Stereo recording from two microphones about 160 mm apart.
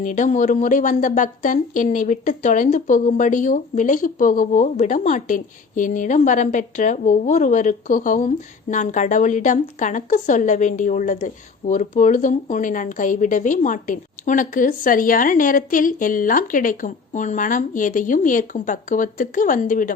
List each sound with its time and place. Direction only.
0.0 s speech: 50° left (ahead or behind)